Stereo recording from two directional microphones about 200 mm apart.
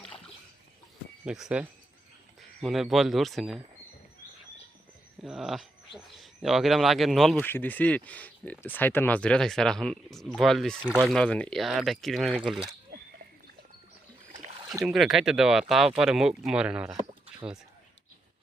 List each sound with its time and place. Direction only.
1.2 s speech: 5° right (ahead or behind)
5.2 s speech: centre (ahead or behind)
10.8 s speech: 10° right (ahead or behind)
11.1 s speech: 5° left (ahead or behind)
14.8 s speech: centre (ahead or behind)